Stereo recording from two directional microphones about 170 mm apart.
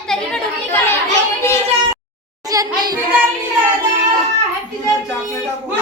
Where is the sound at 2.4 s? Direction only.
20° right (ahead or behind).